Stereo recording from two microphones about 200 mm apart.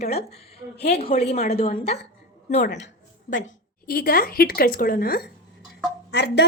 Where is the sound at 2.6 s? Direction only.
60° left (ahead or behind).